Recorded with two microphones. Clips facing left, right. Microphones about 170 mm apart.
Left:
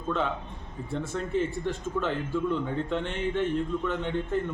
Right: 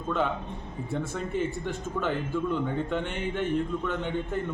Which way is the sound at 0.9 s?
Centre (ahead or behind).